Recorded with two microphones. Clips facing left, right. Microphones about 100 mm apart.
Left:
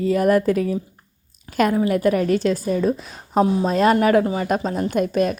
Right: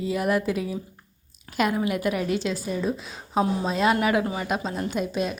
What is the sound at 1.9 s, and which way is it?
A woman's voice, 40° left (ahead or behind).